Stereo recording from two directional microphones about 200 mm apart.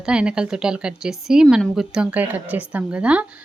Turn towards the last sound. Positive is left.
turn(degrees=-5)  # may be behind; listen again after turning